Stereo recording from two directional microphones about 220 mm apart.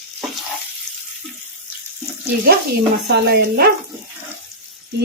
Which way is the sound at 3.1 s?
45° right (ahead or behind).